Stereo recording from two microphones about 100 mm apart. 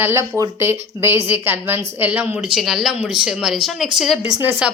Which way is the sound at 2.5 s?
Centre (ahead or behind).